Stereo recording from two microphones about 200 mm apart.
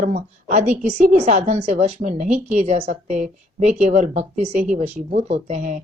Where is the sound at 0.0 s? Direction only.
40° right (ahead or behind).